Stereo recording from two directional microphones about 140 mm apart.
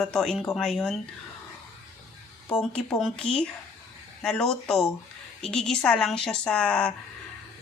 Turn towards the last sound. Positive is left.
turn(degrees=5)  # may be behind; listen again after turning